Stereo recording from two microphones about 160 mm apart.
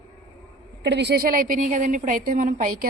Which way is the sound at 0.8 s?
90° right.